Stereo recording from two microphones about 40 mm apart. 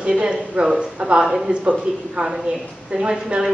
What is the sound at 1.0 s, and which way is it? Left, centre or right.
A woman's voice, right.